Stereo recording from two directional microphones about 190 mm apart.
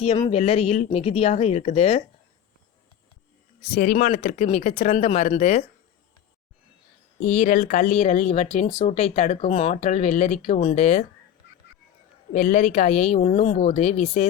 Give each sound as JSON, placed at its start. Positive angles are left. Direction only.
{"t": 0.0, "sound": "speech", "side_deg": 30}
{"t": 3.8, "sound": "speech", "side_deg": 45}
{"t": 7.2, "sound": "speech", "side_deg": 35}
{"t": 12.3, "sound": "speech", "side_deg": 40}